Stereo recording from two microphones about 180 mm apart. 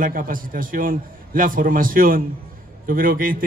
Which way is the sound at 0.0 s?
50° right (ahead or behind).